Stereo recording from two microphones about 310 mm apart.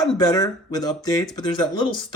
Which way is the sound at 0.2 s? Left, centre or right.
Centre.